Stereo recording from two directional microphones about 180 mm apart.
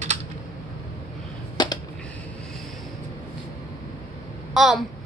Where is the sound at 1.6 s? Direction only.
25° left (ahead or behind).